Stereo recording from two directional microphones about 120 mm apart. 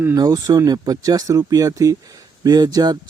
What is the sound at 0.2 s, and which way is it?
Speech, 35° right (ahead or behind).